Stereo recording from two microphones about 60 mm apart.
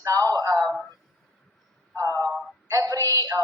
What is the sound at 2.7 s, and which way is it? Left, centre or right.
Speech, right.